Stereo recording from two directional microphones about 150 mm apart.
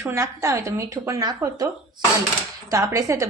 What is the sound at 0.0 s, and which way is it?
A woman's voice, 20° right (ahead or behind).